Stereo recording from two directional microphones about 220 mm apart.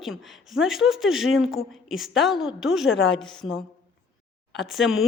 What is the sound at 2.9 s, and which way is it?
Speech, 60° left (ahead or behind).